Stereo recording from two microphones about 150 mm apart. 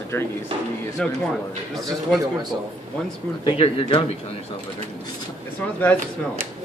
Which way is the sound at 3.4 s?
40° left (ahead or behind).